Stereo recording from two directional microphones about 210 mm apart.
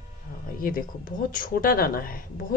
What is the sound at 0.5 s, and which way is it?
Speech, 40° left (ahead or behind).